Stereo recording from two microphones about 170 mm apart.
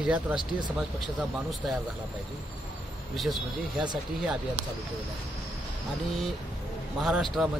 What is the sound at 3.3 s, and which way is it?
Speech, 25° right (ahead or behind).